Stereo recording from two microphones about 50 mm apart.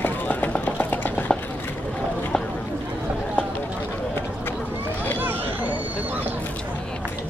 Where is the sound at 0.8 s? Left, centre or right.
Left.